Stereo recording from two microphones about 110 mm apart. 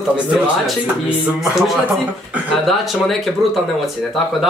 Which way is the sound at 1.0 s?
5° right (ahead or behind).